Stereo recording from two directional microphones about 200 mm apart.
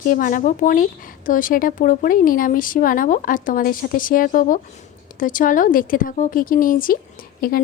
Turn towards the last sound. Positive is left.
turn(degrees=45)  # may be behind; listen again after turning